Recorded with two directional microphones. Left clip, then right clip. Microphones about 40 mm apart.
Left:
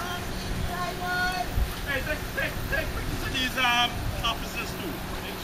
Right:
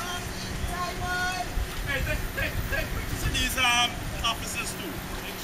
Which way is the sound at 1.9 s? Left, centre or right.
Centre.